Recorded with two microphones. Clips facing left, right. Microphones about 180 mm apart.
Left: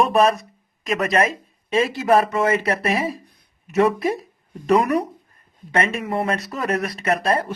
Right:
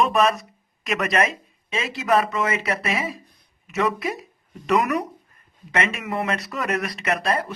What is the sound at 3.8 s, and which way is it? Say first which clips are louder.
A man's voice: left 6 dB; 30° left (ahead or behind).